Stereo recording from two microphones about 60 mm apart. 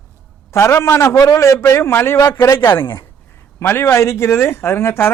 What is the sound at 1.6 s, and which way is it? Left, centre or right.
A man's voice, left.